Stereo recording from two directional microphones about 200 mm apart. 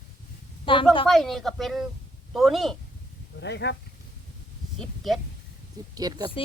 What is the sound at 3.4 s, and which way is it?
Speech, 60° left (ahead or behind).